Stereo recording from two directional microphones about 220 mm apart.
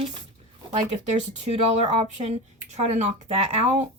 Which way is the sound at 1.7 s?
30° right (ahead or behind).